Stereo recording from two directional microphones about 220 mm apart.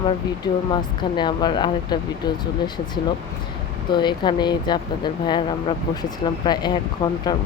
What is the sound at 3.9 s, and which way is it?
Speech, 20° left (ahead or behind).